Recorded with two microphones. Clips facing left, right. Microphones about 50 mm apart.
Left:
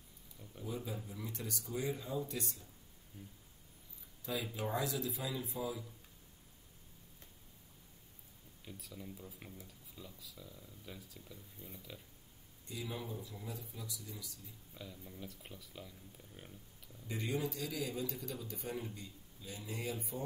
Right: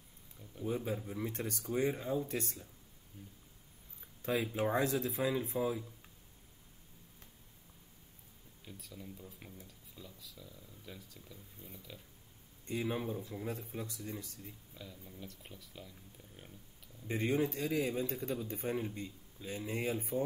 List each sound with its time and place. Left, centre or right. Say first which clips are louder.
0.7 s speech: right 6 dB; right
4.2 s speech: right 6 dB; right
8.6 s speech: even; centre
12.6 s speech: right 7 dB; right
14.7 s speech: even; centre
17.1 s speech: right 6 dB; right